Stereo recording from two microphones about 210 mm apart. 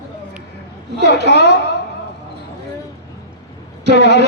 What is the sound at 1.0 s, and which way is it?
Speech, 55° right (ahead or behind).